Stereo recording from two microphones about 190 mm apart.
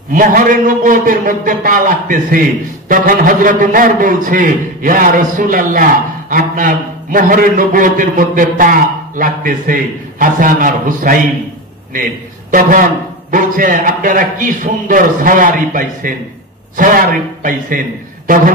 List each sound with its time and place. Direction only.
0.1 s a man's voice: 45° right (ahead or behind)